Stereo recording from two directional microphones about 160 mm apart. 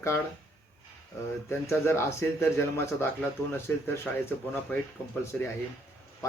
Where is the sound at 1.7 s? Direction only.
15° left (ahead or behind).